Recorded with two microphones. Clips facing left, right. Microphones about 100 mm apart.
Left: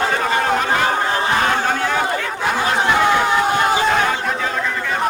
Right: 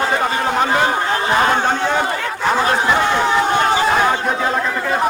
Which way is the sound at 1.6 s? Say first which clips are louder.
Right 2 dB; 20° right (ahead or behind).